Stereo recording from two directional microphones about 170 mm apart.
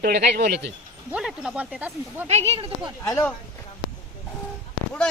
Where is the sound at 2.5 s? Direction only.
30° right (ahead or behind).